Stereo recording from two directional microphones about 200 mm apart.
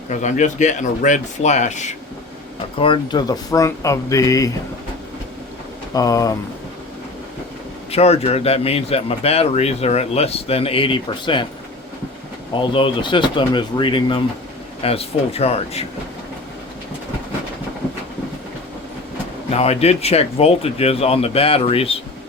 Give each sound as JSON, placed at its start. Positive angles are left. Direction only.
{"t": 0.1, "sound": "speech", "side_deg": 35}
{"t": 2.7, "sound": "speech", "side_deg": 25}
{"t": 5.9, "sound": "speech", "side_deg": 15}
{"t": 7.9, "sound": "speech", "side_deg": 30}
{"t": 12.6, "sound": "speech", "side_deg": 25}
{"t": 19.5, "sound": "speech", "side_deg": 30}